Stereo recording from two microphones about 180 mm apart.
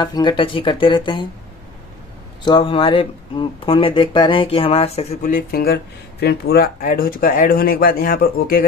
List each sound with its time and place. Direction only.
0.0 s speech: 25° left (ahead or behind)
2.4 s speech: 25° left (ahead or behind)
5.2 s speech: 50° left (ahead or behind)